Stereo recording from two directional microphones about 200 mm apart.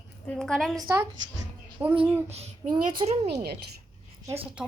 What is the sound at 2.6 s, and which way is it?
Speech, 45° right (ahead or behind).